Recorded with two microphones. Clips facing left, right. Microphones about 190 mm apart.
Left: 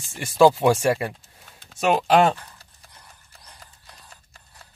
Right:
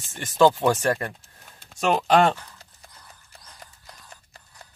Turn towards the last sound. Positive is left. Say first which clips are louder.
# right 1 dB
turn(degrees=20)  # may be behind; listen again after turning